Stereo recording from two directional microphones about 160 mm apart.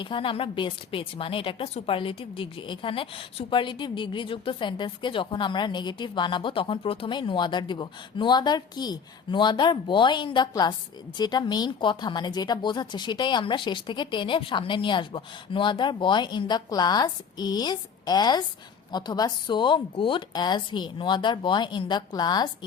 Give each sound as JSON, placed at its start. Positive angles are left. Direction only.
{"t": 0.0, "sound": "a woman's voice", "side_deg": 30}